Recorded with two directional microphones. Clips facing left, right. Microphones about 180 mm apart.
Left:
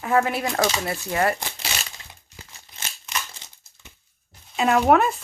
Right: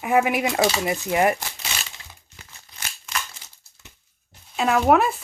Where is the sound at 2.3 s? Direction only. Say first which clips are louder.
Left 2 dB; 25° left (ahead or behind).